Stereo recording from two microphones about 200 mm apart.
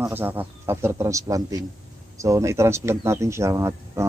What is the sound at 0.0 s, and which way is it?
Speech, 10° right (ahead or behind).